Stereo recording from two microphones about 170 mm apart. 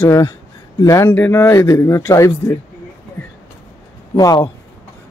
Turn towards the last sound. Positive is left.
turn(degrees=20)  # may be behind; listen again after turning